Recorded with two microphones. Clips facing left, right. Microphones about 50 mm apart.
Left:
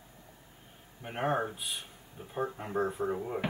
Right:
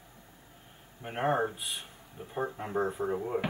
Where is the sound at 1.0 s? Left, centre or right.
Centre.